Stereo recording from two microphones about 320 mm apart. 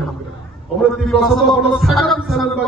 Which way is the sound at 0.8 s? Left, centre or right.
Centre.